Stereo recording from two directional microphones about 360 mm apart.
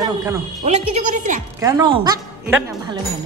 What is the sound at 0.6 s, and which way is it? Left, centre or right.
Speech, centre.